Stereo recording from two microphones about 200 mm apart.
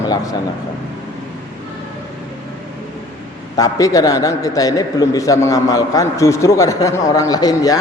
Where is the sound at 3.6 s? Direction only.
15° left (ahead or behind).